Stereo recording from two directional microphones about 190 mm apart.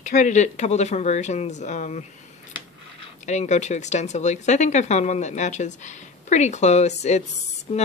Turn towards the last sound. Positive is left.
turn(degrees=30)  # may be behind; listen again after turning